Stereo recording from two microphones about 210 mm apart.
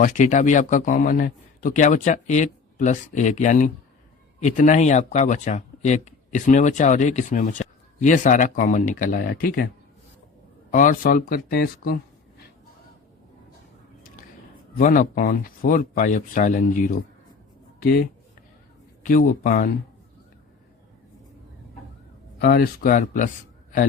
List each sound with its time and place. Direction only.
0.0 s speech: 35° left (ahead or behind)
10.7 s speech: 40° left (ahead or behind)
14.8 s speech: 40° left (ahead or behind)
19.0 s speech: 40° left (ahead or behind)
22.4 s speech: 50° left (ahead or behind)